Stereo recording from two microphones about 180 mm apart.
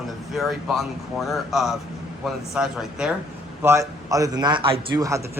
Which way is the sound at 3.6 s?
15° right (ahead or behind).